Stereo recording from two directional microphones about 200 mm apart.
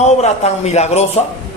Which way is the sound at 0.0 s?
35° left (ahead or behind).